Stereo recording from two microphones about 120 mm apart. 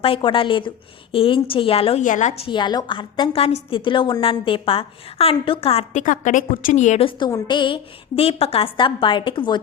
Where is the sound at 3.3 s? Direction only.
55° left (ahead or behind).